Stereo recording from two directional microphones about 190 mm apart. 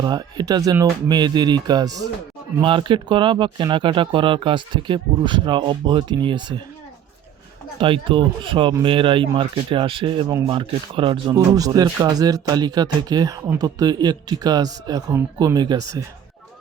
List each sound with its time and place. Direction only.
0.0 s speech: 20° right (ahead or behind)
7.8 s speech: 25° right (ahead or behind)